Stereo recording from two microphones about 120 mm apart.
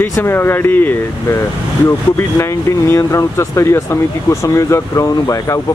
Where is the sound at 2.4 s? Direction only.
25° left (ahead or behind).